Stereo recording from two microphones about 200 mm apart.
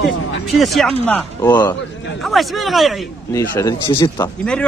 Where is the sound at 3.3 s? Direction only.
15° left (ahead or behind).